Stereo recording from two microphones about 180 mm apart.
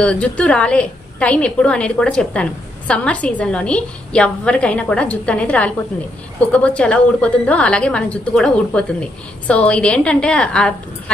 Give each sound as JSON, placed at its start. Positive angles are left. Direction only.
{"t": 0.0, "sound": "a woman's voice", "side_deg": 5}